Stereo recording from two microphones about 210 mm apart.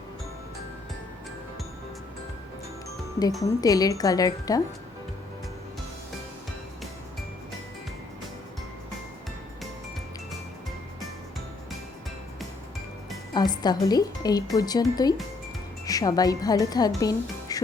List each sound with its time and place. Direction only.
3.4 s speech: 15° left (ahead or behind)
13.3 s music: 20° left (ahead or behind)
13.8 s speech: 20° left (ahead or behind)